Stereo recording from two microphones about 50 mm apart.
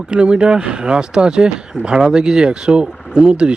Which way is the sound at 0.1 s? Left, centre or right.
Centre.